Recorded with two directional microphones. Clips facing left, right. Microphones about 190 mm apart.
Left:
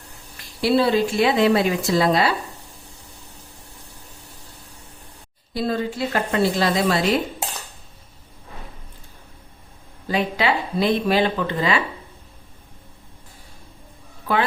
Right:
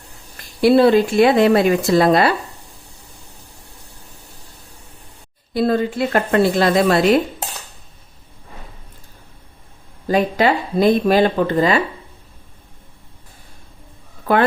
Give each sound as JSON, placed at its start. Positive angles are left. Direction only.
{"t": 0.6, "sound": "speech", "side_deg": -55}
{"t": 5.5, "sound": "speech", "side_deg": -55}
{"t": 10.1, "sound": "speech", "side_deg": -45}